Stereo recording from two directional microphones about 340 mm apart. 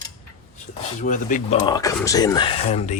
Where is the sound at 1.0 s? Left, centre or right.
Left.